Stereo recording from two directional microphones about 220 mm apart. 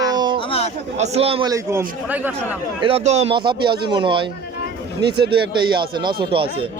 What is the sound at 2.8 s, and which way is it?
A man's voice, 25° right (ahead or behind).